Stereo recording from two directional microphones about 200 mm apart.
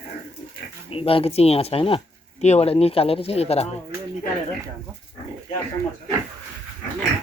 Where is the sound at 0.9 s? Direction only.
25° left (ahead or behind).